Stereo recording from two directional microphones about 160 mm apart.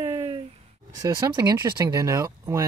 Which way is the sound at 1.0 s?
20° right (ahead or behind).